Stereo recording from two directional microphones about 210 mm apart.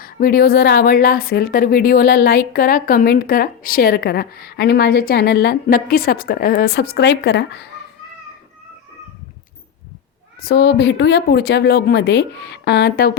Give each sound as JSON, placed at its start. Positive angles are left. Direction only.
{"t": 0.0, "sound": "a woman's voice", "side_deg": 45}
{"t": 10.4, "sound": "a woman's voice", "side_deg": 50}